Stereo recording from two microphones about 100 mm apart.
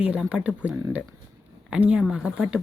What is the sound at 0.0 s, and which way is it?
Speech, 10° right (ahead or behind).